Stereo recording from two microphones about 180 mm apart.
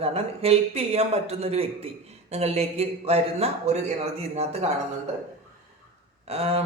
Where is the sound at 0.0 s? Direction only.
35° right (ahead or behind).